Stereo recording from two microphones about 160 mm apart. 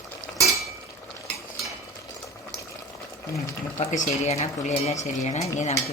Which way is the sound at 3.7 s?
45° left (ahead or behind).